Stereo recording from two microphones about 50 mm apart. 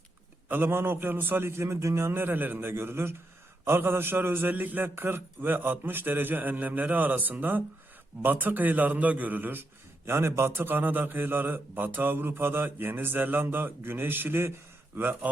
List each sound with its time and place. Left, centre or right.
0.4 s mantra: right
1.6 s speech: right
2.2 s mantra: right
3.7 s a man's voice: right
10.1 s a man's voice: right
10.6 s mantra: right